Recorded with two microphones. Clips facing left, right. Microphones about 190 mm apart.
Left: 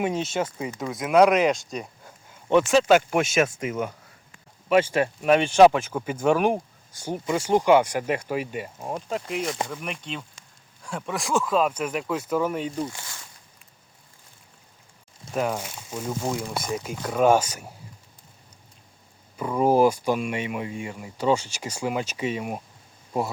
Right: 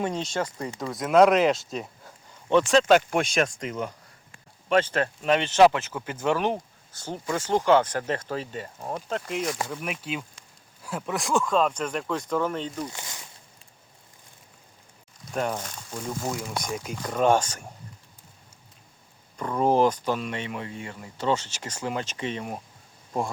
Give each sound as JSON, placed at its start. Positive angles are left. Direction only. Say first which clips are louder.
{"t": 0.0, "sound": "speech", "louder": "left 2 dB", "side_deg": 5}
{"t": 12.9, "sound": "speech", "louder": "right 1 dB", "side_deg": -20}
{"t": 15.3, "sound": "speech", "louder": "left 2 dB", "side_deg": 5}
{"t": 19.4, "sound": "speech", "louder": "left 2 dB", "side_deg": 10}